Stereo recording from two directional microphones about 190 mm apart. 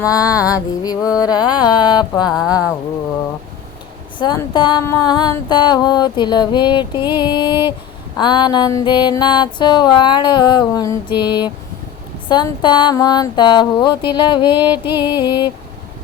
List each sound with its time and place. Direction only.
0.0 s music: 20° left (ahead or behind)
1.2 s mantra: 20° left (ahead or behind)
4.2 s mantra: 20° left (ahead or behind)